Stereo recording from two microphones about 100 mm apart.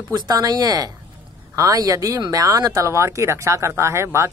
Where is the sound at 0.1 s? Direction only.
45° right (ahead or behind).